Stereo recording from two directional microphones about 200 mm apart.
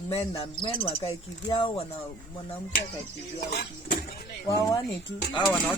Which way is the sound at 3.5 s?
50° left (ahead or behind).